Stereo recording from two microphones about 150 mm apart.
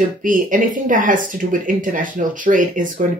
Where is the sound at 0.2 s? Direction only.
60° right (ahead or behind).